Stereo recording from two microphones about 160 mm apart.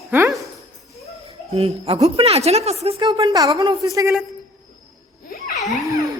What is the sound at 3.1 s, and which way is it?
Speech, 25° right (ahead or behind).